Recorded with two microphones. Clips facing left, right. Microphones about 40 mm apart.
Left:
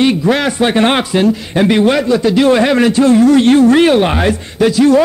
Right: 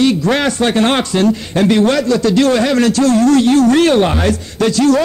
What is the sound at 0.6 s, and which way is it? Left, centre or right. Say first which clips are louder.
A man's voice: left 2 dB; centre.